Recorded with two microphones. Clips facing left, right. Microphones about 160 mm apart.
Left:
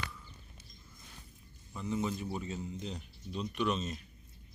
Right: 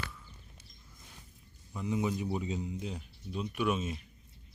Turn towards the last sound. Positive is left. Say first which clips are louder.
# right 2 dB
turn(degrees=-10)  # may be behind; listen again after turning